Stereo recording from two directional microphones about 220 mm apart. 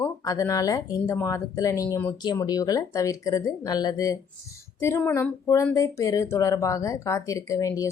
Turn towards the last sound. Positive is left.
turn(degrees=15)  # may be behind; listen again after turning